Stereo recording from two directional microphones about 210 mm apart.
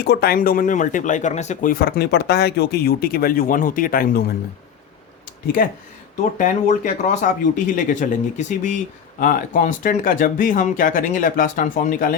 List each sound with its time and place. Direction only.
0.0 s speech: 50° left (ahead or behind)
5.6 s speech: 40° left (ahead or behind)